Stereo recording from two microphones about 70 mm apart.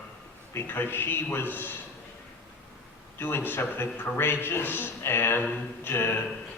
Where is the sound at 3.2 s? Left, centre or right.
Left.